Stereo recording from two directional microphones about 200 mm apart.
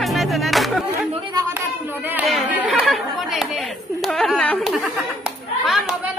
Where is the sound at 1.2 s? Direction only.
15° right (ahead or behind).